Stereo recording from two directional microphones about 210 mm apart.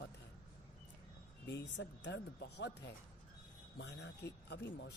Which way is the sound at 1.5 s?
55° left (ahead or behind).